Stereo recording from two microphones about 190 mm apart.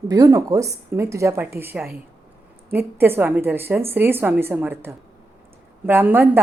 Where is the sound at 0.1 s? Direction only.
20° right (ahead or behind).